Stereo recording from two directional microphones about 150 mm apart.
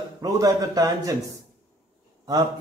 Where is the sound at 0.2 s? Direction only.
25° right (ahead or behind).